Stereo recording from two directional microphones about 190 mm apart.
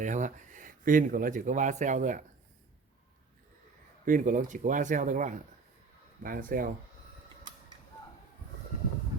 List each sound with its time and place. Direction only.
0.0 s speech: 40° right (ahead or behind)
4.0 s speech: 45° right (ahead or behind)